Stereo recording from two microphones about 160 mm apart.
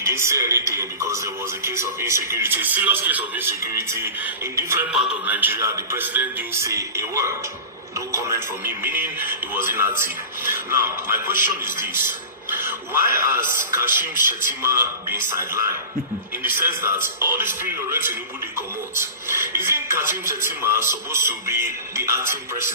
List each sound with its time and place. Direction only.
0.0 s a man's voice: 15° right (ahead or behind)